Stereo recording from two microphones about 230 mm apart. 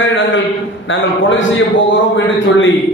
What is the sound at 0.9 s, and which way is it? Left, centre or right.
A man's voice, left.